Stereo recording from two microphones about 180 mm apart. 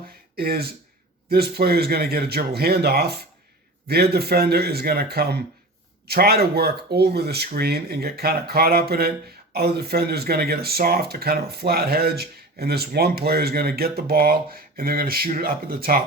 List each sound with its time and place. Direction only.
0.3 s speech: 55° right (ahead or behind)